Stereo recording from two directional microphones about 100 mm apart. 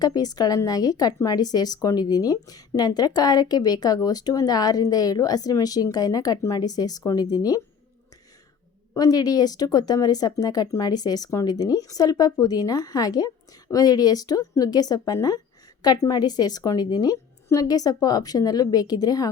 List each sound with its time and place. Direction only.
0.0 s speech: 40° left (ahead or behind)
9.0 s speech: 40° left (ahead or behind)